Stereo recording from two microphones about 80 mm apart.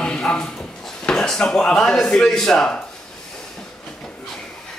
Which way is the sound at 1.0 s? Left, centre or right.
Centre.